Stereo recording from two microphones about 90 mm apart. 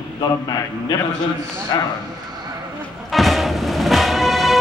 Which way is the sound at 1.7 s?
50° left (ahead or behind).